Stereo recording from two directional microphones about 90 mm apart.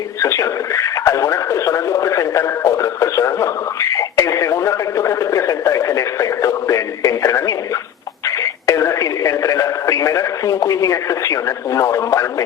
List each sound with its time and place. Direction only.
0.2 s radio: 35° left (ahead or behind)
8.6 s radio: 35° left (ahead or behind)